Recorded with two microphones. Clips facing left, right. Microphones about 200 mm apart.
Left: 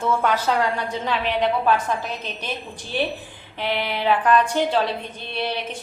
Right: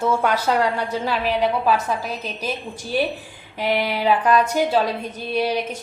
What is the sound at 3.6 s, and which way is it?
A woman's voice, 10° right (ahead or behind).